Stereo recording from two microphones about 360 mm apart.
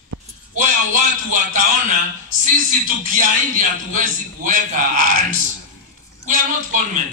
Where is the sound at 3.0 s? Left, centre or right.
Right.